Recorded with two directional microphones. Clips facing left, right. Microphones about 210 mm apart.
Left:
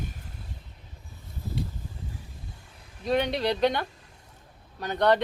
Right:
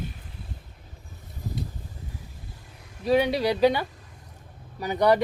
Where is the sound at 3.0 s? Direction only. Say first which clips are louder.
Right 4 dB; 5° right (ahead or behind).